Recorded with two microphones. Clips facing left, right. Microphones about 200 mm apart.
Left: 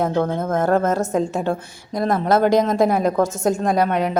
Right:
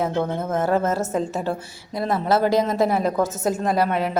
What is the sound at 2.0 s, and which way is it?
Speech, 45° left (ahead or behind).